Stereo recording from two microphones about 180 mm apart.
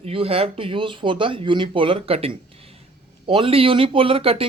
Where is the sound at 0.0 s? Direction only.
30° right (ahead or behind).